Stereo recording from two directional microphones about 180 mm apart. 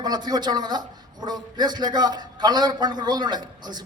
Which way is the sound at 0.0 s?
25° right (ahead or behind).